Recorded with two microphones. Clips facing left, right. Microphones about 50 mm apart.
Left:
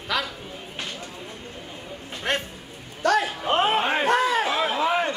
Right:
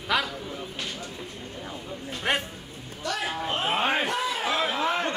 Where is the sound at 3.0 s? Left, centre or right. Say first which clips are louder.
Left 11 dB; left.